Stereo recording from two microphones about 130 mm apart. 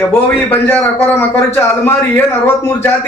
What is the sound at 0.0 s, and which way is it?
A man's voice, 15° left (ahead or behind).